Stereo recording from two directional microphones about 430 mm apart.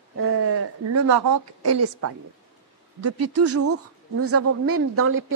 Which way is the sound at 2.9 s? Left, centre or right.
Right.